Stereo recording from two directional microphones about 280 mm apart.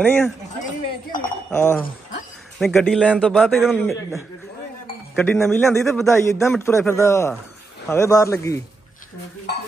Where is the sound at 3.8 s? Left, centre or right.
Centre.